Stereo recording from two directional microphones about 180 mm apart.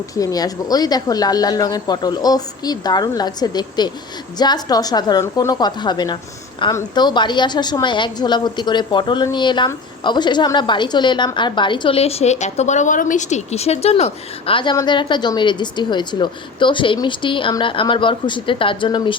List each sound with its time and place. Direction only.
0.2 s a woman's voice: 20° left (ahead or behind)